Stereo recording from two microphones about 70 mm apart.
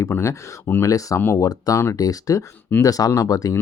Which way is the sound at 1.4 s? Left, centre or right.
Left.